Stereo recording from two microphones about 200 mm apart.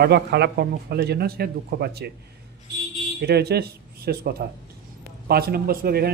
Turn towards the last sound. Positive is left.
turn(degrees=-50)  # may be behind; listen again after turning